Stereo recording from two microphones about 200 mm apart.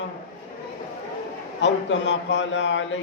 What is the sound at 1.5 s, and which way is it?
A man's voice, 65° left (ahead or behind).